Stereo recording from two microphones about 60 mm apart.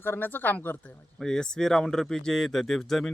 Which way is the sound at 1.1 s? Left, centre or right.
Centre.